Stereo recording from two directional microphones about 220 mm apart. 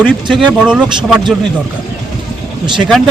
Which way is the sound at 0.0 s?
5° left (ahead or behind).